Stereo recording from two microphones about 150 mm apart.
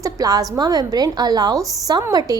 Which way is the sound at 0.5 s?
25° right (ahead or behind).